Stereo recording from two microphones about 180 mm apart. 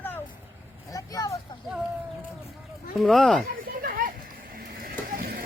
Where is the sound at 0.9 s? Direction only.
20° left (ahead or behind).